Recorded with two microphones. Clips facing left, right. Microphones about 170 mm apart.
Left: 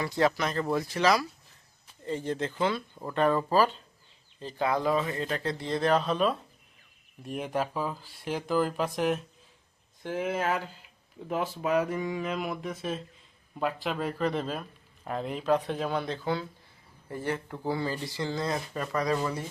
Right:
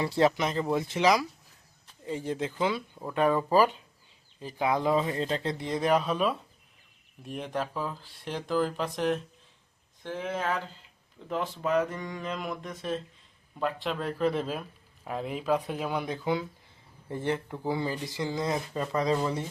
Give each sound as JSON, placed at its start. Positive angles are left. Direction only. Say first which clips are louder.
{"t": 0.0, "sound": "speech", "louder": "right 2 dB", "side_deg": -25}
{"t": 7.2, "sound": "speech", "louder": "left 2 dB", "side_deg": 5}